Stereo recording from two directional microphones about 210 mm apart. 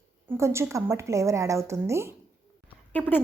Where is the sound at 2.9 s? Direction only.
10° left (ahead or behind).